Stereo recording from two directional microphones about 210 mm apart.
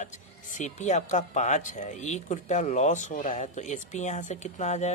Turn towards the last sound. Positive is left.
turn(degrees=35)  # may be behind; listen again after turning